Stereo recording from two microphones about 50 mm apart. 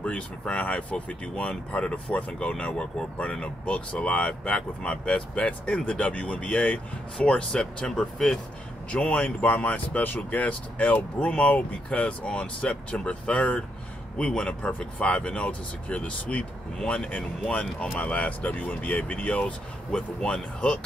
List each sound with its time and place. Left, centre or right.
0.0 s speech: left
8.9 s speech: left